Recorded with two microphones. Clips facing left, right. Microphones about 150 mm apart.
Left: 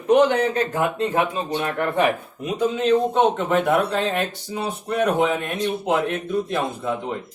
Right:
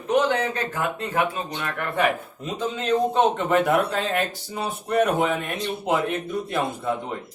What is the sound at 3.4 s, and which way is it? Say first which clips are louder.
Speech: left 1 dB; centre (ahead or behind).